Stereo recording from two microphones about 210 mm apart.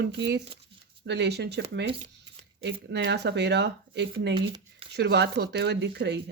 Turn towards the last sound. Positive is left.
turn(degrees=-55)  # may be behind; listen again after turning